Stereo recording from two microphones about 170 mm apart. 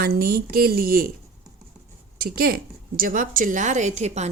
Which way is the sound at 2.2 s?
60° right (ahead or behind).